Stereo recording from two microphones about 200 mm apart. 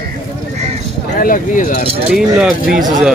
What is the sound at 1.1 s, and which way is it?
Speech, 45° left (ahead or behind).